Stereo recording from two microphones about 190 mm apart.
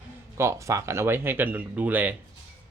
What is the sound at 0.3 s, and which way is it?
Speech, 15° right (ahead or behind).